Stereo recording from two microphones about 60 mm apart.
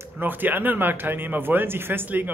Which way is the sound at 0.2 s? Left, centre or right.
Right.